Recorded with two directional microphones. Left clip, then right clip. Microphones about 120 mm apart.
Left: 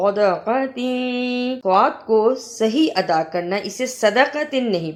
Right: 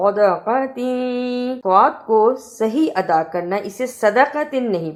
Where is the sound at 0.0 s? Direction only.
30° left (ahead or behind).